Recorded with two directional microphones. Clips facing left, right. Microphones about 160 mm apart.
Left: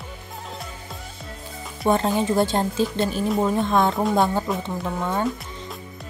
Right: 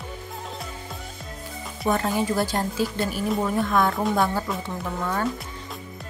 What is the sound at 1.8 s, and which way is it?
Speech, 25° left (ahead or behind).